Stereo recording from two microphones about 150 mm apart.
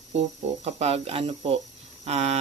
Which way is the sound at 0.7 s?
45° right (ahead or behind).